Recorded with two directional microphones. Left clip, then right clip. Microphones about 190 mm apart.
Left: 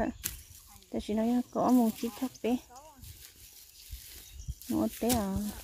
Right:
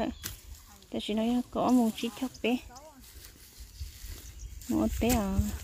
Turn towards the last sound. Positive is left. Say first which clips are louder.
# right 1 dB
turn(degrees=-10)  # may be behind; listen again after turning